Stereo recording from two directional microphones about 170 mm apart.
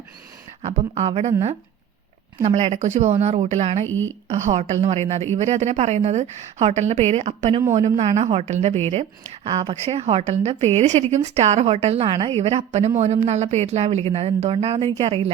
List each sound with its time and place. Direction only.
0.6 s a woman's voice: 40° right (ahead or behind)
2.4 s a woman's voice: 40° right (ahead or behind)
9.5 s speech: 25° right (ahead or behind)
9.8 s a woman's voice: 40° right (ahead or behind)